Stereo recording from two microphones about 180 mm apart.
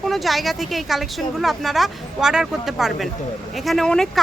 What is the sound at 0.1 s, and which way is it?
Speech, centre (ahead or behind).